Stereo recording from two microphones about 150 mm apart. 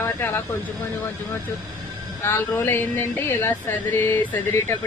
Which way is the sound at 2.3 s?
15° left (ahead or behind).